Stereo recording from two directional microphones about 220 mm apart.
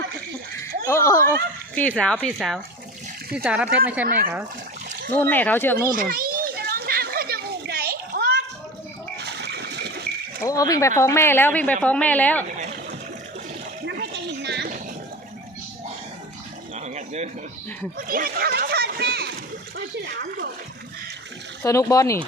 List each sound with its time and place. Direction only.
0.9 s a child's voice: 15° left (ahead or behind); by 4.0 s 5° right (ahead or behind)
5.1 s a woman's voice: 10° left (ahead or behind)
5.9 s children playing: 40° right (ahead or behind)
9.1 s water: 50° right (ahead or behind)
10.4 s a woman's voice: 15° left (ahead or behind)
13.8 s a sound: 50° right (ahead or behind)
16.7 s a sound: 30° right (ahead or behind)
21.6 s a woman's voice: 15° left (ahead or behind)